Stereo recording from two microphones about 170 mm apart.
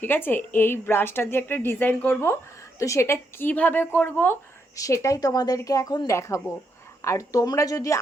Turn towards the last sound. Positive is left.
turn(degrees=20)  # may be behind; listen again after turning